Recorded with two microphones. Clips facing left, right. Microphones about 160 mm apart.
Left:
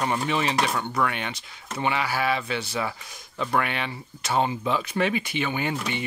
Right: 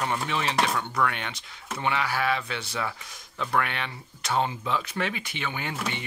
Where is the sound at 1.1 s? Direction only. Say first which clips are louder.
Left 3 dB; 5° left (ahead or behind).